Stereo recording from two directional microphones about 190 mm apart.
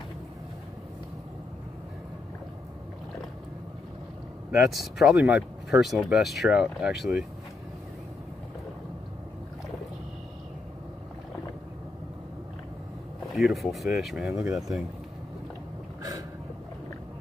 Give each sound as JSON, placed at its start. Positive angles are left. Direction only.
{"t": 4.5, "sound": "speech", "side_deg": 0}
{"t": 13.3, "sound": "speech", "side_deg": 0}
{"t": 16.0, "sound": "a sound", "side_deg": -20}